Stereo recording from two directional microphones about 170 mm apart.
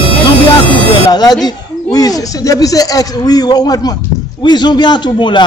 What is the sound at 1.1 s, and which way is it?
Speech, 25° left (ahead or behind).